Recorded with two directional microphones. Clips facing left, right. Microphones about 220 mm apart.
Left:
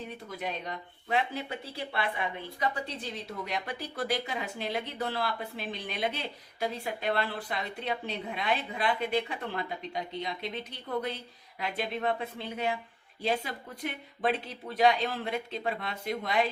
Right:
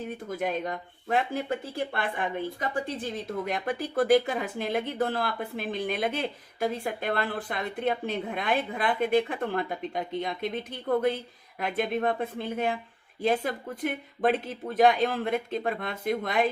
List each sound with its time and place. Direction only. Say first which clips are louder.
0.3 s speech: right 7 dB; 50° right (ahead or behind)